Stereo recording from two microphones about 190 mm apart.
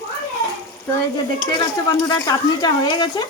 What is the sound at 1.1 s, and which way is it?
Speech, 20° left (ahead or behind).